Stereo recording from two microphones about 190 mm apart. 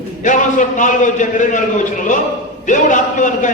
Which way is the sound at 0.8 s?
40° left (ahead or behind).